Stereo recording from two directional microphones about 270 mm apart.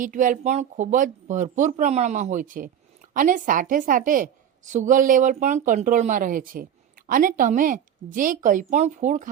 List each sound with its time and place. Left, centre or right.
0.0 s a woman's voice: right